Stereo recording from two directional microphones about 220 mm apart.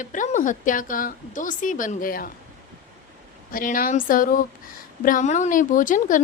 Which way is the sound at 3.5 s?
40° left (ahead or behind).